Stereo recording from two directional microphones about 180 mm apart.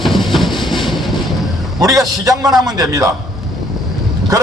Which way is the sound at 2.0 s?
20° right (ahead or behind).